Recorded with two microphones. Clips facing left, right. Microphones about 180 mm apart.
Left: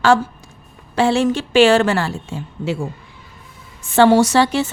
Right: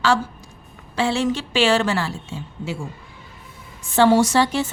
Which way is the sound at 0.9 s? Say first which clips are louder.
Left 5 dB; 50° left (ahead or behind).